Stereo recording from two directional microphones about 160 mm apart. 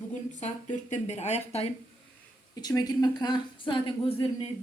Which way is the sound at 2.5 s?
25° left (ahead or behind).